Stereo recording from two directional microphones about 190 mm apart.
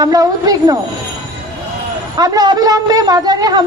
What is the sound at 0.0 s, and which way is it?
Speech, 20° right (ahead or behind).